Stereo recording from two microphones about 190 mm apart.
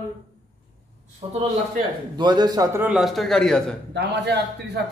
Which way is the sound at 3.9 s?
60° right (ahead or behind).